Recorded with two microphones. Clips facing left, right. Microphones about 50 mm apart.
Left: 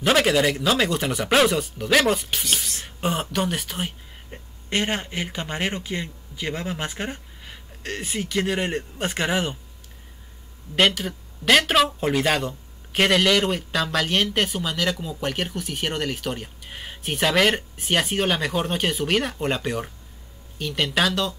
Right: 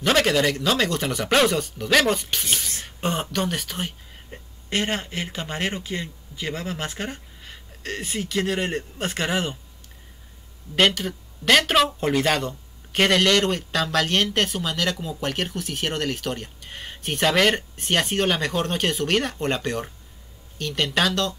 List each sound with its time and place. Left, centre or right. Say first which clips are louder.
0.0 s speech: left 1 dB; centre
10.8 s speech: even; centre